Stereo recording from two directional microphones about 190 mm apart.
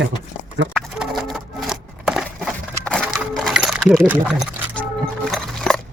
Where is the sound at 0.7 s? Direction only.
5° right (ahead or behind).